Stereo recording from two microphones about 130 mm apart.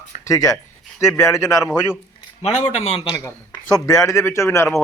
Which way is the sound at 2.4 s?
60° left (ahead or behind).